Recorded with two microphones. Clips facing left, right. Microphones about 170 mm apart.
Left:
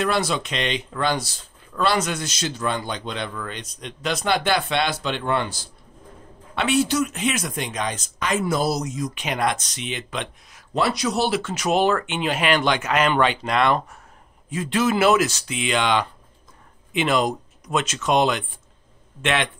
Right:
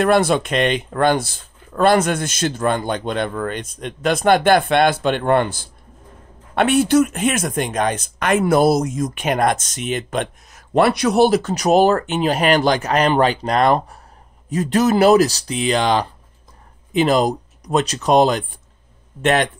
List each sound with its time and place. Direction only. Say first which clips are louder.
0.0 s speech: right 7 dB; 55° right (ahead or behind)